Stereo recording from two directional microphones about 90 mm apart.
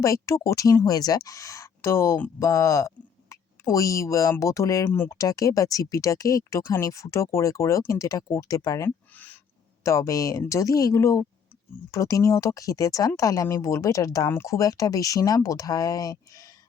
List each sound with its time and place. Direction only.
0.0 s speech: 35° left (ahead or behind)
9.1 s owl: 20° left (ahead or behind)
9.8 s speech: 35° left (ahead or behind)